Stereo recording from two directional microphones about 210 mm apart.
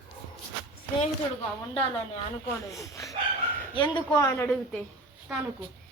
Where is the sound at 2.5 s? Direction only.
15° left (ahead or behind).